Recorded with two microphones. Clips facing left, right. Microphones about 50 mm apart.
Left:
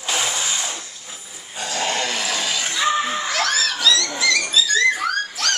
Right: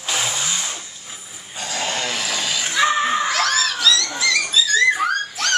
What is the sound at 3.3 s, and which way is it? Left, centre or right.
Dog, centre.